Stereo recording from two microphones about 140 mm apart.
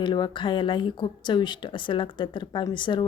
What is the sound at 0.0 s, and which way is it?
A woman's voice, 35° left (ahead or behind).